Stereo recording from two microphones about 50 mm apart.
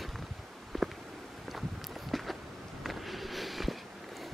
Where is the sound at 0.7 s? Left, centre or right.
Centre.